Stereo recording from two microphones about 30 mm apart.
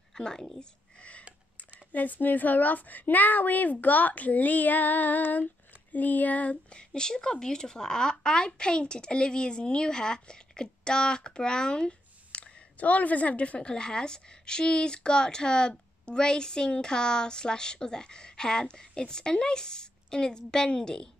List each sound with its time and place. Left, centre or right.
0.1 s speech: left
1.9 s a woman's voice: left
6.7 s speech: left
11.8 s a sound: left
12.7 s a woman's voice: left
13.6 s speech: left